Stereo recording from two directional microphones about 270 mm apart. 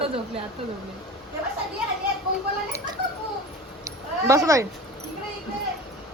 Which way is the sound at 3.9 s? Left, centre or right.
Centre.